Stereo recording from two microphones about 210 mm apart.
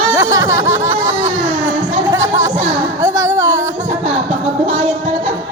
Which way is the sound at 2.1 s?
15° right (ahead or behind).